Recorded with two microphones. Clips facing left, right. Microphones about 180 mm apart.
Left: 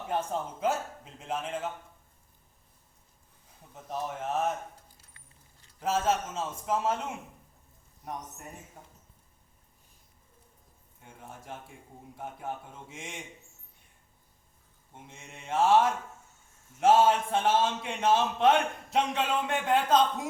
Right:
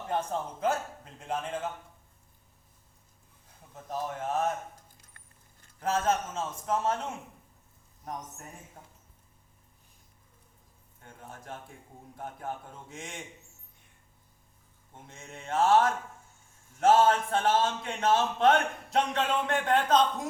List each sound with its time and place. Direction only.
0.1 s a man's voice: 5° left (ahead or behind)
3.9 s a man's voice: centre (ahead or behind)
4.9 s music: 50° right (ahead or behind)
5.8 s a man's voice: 5° left (ahead or behind)
11.0 s a man's voice: 5° left (ahead or behind)
14.9 s a man's voice: 5° left (ahead or behind)